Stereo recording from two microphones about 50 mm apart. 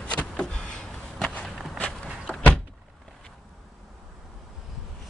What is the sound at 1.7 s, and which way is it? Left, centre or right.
Walk, left.